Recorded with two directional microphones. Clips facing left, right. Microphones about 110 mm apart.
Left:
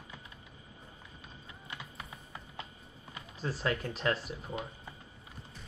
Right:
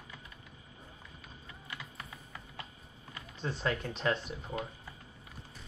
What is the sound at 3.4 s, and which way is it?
Speech, centre (ahead or behind).